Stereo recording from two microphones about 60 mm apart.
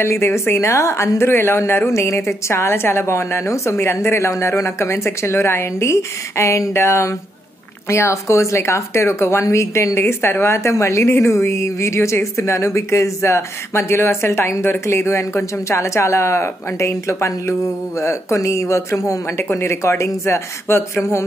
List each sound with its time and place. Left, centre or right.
0.0 s a woman's voice: left
19.3 s a woman's voice: left